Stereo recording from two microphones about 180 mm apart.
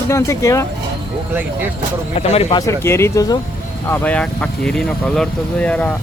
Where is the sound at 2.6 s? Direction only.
15° left (ahead or behind).